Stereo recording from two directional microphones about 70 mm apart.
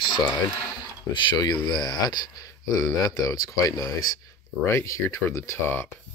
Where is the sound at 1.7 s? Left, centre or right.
Left.